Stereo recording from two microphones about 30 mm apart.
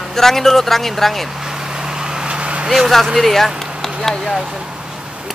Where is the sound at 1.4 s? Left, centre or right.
Centre; by 2.7 s right.